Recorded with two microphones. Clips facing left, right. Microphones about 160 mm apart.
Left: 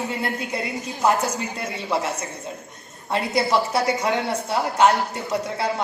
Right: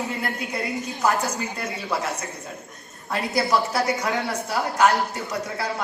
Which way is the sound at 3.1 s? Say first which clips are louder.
Left 2 dB; 25° left (ahead or behind).